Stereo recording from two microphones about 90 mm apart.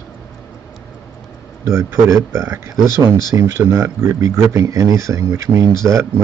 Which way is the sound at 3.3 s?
25° right (ahead or behind).